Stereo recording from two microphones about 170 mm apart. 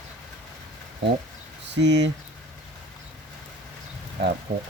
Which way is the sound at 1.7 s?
90° right.